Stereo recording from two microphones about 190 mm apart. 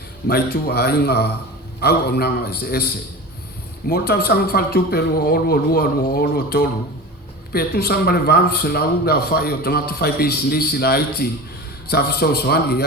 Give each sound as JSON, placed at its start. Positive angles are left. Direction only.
{"t": 0.3, "sound": "a man's voice", "side_deg": 55}